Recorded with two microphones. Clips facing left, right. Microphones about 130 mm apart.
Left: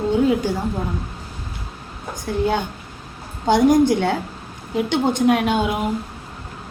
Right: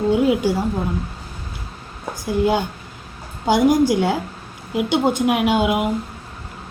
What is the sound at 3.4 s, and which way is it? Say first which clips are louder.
A woman's voice: left 1 dB; 10° right (ahead or behind).